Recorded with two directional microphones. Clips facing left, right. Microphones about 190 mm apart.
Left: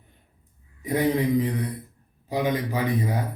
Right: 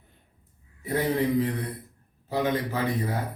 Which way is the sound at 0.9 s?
15° left (ahead or behind).